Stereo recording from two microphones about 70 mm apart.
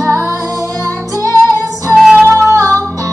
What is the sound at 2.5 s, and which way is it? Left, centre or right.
Music, right.